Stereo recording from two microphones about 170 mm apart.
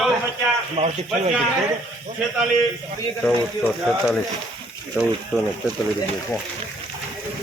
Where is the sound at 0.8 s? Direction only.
35° right (ahead or behind).